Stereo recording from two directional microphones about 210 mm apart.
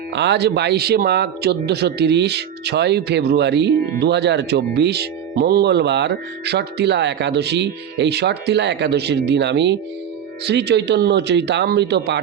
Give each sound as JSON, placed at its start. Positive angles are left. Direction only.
{"t": 0.1, "sound": "speech", "side_deg": -55}